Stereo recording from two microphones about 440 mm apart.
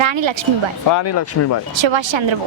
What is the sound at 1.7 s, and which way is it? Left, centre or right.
Speech, right.